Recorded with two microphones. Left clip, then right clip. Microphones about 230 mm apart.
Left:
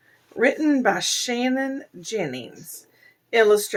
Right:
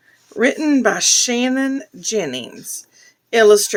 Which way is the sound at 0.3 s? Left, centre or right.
Right.